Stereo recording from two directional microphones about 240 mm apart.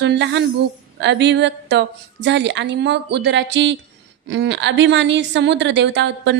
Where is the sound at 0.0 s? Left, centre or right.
Right.